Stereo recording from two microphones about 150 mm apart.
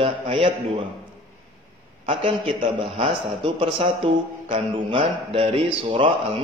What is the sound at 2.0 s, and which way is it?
Speech, 40° right (ahead or behind).